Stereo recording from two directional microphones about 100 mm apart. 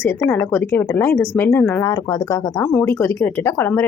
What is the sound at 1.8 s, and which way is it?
Speech, 40° left (ahead or behind).